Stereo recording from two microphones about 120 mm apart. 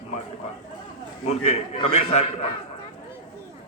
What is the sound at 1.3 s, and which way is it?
A man's voice, 70° left (ahead or behind).